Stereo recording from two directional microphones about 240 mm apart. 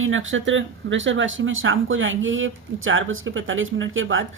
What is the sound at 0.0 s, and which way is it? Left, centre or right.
Speech, right.